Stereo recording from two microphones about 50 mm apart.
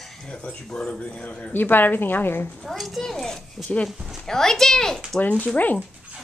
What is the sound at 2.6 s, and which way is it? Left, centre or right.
A child's voice, centre.